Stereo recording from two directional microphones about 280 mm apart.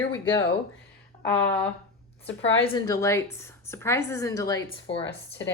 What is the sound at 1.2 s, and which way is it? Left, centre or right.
A woman's voice, centre.